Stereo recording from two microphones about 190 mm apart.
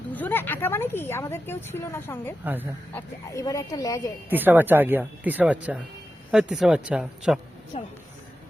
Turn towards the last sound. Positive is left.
turn(degrees=30)  # may be behind; listen again after turning